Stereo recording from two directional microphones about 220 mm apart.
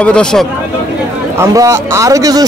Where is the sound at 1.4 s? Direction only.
15° right (ahead or behind).